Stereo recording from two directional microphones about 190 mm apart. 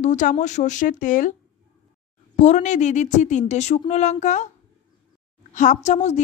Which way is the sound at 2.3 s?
40° left (ahead or behind).